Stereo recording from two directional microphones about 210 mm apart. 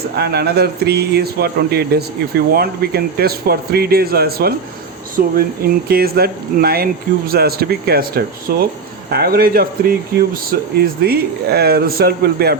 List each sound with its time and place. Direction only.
0.2 s speech: 50° right (ahead or behind)